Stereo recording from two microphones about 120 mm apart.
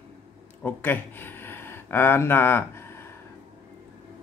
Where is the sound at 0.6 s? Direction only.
15° left (ahead or behind).